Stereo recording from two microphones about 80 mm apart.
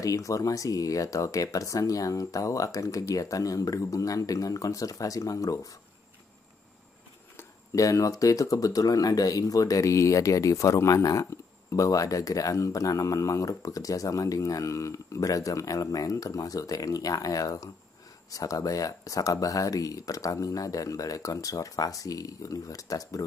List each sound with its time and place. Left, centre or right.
0.0 s speech: left
7.7 s speech: left